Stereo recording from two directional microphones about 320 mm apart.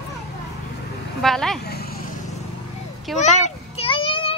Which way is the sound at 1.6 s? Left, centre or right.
Left.